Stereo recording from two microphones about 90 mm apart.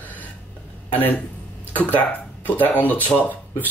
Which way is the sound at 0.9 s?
20° left (ahead or behind).